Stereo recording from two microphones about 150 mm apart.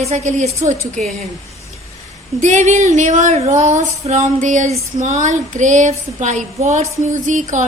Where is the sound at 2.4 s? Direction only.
55° right (ahead or behind).